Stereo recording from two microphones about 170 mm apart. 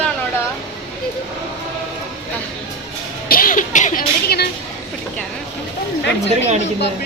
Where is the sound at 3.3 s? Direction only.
55° left (ahead or behind).